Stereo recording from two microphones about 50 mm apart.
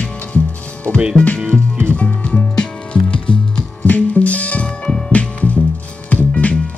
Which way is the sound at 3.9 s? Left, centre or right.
Left.